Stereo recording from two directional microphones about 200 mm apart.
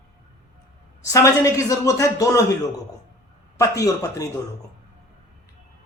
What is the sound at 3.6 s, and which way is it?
Speech, 15° left (ahead or behind).